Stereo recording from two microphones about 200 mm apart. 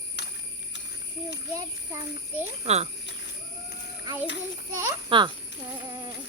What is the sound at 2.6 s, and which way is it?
Speech, 35° right (ahead or behind).